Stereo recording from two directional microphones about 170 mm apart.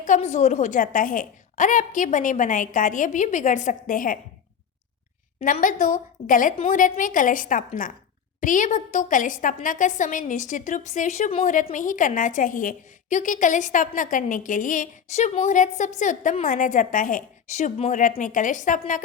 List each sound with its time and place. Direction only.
0.0 s a woman's voice: 45° left (ahead or behind)
5.4 s a woman's voice: 50° left (ahead or behind)
11.4 s a woman's voice: 50° left (ahead or behind)